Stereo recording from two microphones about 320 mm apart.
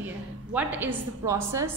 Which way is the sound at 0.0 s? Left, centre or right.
Centre.